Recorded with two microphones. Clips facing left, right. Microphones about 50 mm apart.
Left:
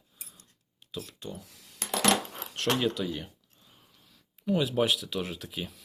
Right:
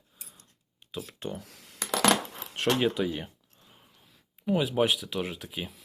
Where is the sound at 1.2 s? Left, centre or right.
Right.